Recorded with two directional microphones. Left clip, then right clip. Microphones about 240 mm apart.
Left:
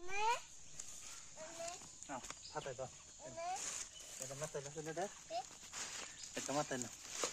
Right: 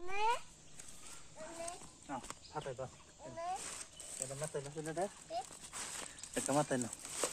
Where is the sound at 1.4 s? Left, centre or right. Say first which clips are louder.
Right 2 dB; right.